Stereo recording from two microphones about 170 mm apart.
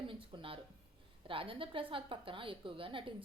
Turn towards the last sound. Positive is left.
turn(degrees=-30)  # may be behind; listen again after turning